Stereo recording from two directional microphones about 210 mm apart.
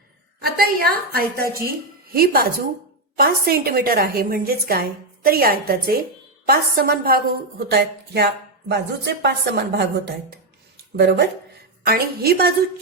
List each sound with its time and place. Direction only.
0.4 s a woman's voice: 45° right (ahead or behind)